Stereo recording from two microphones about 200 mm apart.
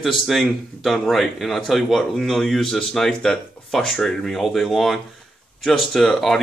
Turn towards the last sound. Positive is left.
turn(degrees=0)  # may be behind; listen again after turning